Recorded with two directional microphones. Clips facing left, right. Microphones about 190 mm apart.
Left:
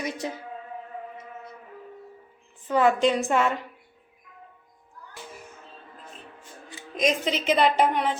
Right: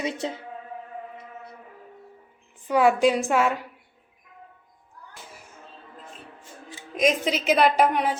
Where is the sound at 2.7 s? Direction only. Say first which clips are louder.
Right 2 dB; 10° right (ahead or behind).